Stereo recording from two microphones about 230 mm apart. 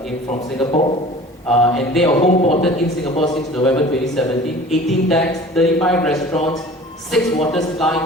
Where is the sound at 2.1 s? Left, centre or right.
Left.